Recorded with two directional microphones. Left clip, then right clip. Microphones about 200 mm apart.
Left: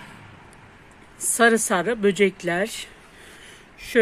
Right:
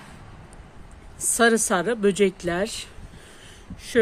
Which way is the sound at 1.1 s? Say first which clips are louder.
Left 1 dB; centre (ahead or behind).